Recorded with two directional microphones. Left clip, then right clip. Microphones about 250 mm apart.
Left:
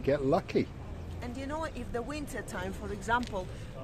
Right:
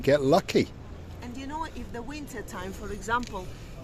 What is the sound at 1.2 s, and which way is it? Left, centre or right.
Speech, centre.